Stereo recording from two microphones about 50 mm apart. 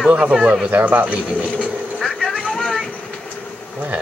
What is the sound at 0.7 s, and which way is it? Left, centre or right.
Speech, right.